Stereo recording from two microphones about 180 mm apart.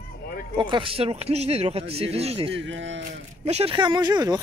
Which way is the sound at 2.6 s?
90° right.